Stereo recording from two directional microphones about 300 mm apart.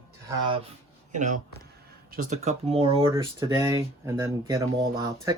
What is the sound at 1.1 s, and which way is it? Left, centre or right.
Speech, right.